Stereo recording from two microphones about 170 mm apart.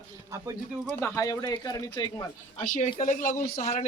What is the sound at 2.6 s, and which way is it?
Speech, 45° left (ahead or behind).